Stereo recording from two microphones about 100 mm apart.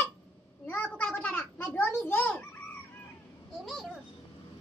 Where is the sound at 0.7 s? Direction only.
15° left (ahead or behind).